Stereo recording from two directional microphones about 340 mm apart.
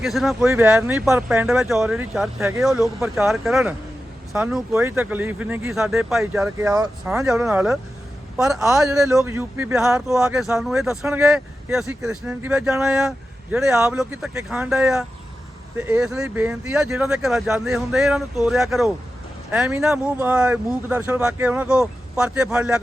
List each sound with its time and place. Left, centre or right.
0.0 s speech: centre